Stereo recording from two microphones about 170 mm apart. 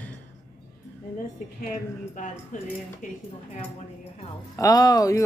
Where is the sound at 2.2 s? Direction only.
50° left (ahead or behind).